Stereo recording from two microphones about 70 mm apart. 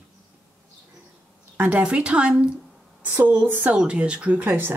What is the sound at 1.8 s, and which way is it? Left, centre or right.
Speech, centre.